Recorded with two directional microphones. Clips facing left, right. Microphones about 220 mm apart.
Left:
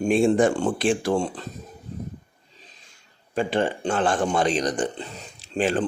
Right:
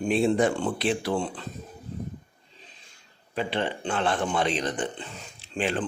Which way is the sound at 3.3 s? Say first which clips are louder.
Left 5 dB; 45° left (ahead or behind).